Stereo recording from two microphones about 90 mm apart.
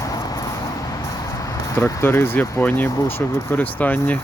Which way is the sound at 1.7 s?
30° left (ahead or behind).